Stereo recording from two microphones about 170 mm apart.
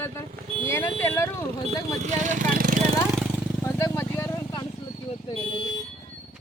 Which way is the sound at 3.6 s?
15° left (ahead or behind).